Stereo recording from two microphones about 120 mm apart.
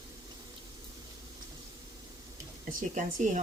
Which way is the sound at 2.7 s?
90° right.